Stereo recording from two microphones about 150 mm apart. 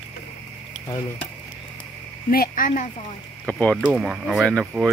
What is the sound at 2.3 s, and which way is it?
Speech, 70° left (ahead or behind).